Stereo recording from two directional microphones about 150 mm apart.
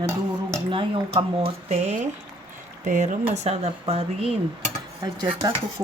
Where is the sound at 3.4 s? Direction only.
45° right (ahead or behind).